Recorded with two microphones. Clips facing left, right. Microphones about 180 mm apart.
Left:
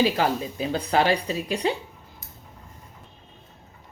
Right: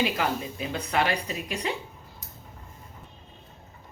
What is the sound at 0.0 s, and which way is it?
Speech, 35° left (ahead or behind).